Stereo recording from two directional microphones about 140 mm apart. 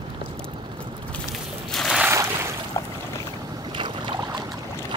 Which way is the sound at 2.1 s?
20° right (ahead or behind).